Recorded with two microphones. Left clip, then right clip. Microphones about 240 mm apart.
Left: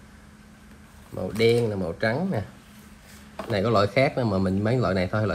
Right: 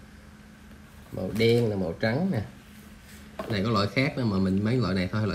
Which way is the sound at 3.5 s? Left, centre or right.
Centre.